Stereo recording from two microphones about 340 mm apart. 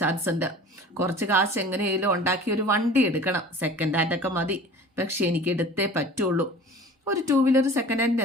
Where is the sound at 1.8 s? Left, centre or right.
Right.